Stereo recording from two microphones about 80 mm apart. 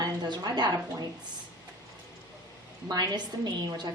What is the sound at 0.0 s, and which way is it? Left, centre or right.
A woman's voice, right.